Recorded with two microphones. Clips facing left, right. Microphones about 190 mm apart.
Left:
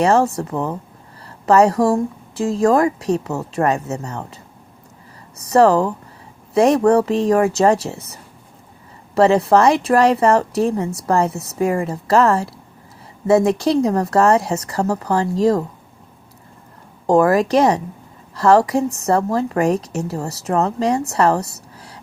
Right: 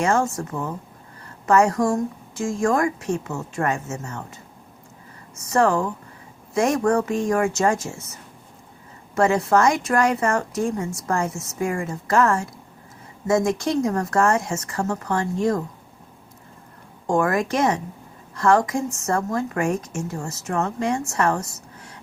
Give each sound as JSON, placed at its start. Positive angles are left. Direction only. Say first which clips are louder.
{"t": 0.0, "sound": "a woman's voice", "louder": "left 6 dB", "side_deg": 35}
{"t": 5.4, "sound": "speech", "louder": "left 6 dB", "side_deg": 35}
{"t": 17.1, "sound": "speech", "louder": "left 7 dB", "side_deg": 35}
{"t": 21.1, "sound": "a sound", "louder": "left 6 dB", "side_deg": 35}